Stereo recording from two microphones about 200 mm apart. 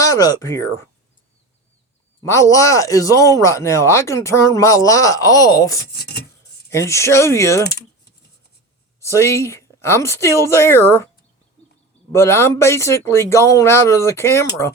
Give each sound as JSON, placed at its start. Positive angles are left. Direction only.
{"t": 0.0, "sound": "speech", "side_deg": 15}
{"t": 2.2, "sound": "speech", "side_deg": 15}
{"t": 5.8, "sound": "rub", "side_deg": 55}
{"t": 6.7, "sound": "speech", "side_deg": 15}
{"t": 7.7, "sound": "typing", "side_deg": 55}
{"t": 9.0, "sound": "speech", "side_deg": 15}
{"t": 12.1, "sound": "speech", "side_deg": 15}